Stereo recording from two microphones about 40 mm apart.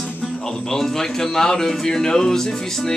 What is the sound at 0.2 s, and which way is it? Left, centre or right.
Speech, centre.